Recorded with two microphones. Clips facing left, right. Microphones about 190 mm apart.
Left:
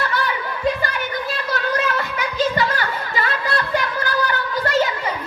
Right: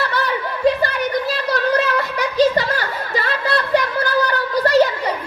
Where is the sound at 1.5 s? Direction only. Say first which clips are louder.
Right 4 dB; 35° right (ahead or behind).